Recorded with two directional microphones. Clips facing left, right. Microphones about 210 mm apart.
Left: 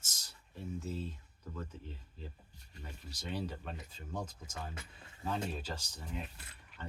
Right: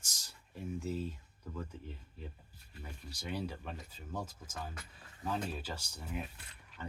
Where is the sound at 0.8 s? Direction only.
15° right (ahead or behind).